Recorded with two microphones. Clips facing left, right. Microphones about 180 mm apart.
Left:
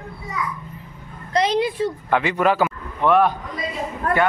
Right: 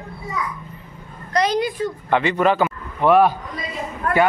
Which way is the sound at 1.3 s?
25° left (ahead or behind).